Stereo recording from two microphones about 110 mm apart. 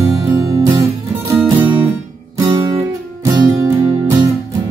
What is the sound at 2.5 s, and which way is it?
Music, 35° right (ahead or behind).